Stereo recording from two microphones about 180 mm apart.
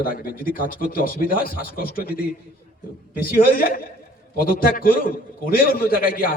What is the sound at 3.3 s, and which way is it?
A man's voice, 55° left (ahead or behind).